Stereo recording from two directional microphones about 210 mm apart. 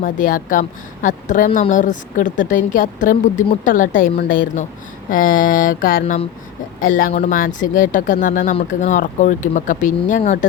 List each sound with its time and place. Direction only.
0.0 s a woman's voice: 40° left (ahead or behind)